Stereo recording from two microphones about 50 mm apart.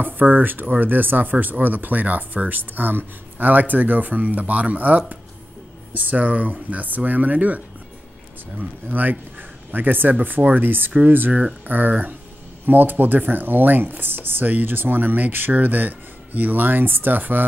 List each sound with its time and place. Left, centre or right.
0.0 s speech: right
8.8 s speech: right